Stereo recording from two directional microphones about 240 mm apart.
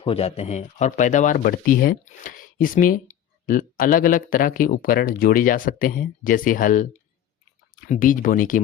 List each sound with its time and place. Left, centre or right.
0.0 s speech: left
7.9 s speech: left